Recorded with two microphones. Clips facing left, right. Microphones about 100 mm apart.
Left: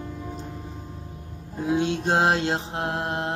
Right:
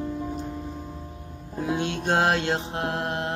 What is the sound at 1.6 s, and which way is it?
Mantra, 25° left (ahead or behind).